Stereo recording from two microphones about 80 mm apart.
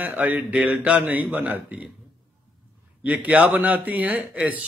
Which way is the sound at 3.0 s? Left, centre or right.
Centre.